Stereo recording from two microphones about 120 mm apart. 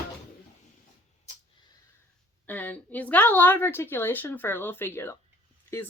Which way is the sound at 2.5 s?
15° left (ahead or behind).